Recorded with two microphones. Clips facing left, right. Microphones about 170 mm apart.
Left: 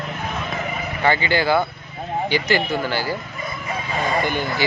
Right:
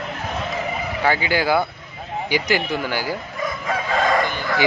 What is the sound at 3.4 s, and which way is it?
Crowing, 90° right.